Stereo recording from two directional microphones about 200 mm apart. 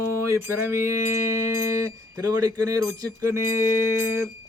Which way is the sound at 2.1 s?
20° right (ahead or behind).